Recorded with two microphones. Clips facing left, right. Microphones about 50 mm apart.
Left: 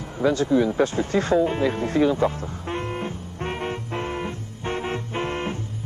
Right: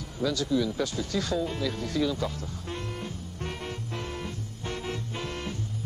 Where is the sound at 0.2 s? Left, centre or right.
Left.